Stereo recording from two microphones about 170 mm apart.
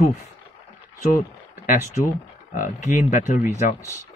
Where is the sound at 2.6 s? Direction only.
50° left (ahead or behind).